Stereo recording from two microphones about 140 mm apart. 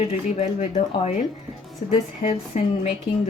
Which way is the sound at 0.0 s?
50° left (ahead or behind).